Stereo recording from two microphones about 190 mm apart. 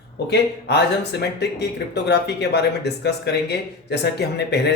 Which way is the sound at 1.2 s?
60° left (ahead or behind).